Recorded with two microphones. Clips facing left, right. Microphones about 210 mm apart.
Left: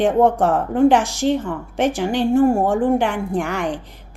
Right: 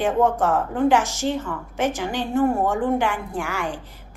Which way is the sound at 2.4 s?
30° left (ahead or behind).